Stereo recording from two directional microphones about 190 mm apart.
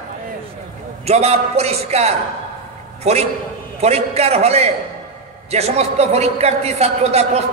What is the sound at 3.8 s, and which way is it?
A man's voice, 35° right (ahead or behind).